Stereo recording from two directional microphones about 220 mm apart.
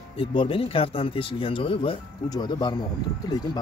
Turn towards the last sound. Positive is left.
turn(degrees=15)  # may be behind; listen again after turning